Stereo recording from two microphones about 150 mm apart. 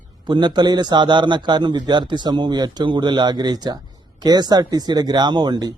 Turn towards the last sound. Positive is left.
turn(degrees=-30)  # may be behind; listen again after turning